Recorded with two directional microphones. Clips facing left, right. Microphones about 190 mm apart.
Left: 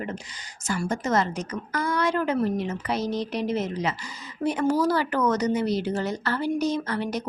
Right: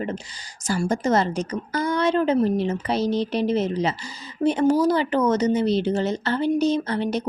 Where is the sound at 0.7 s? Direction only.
35° right (ahead or behind).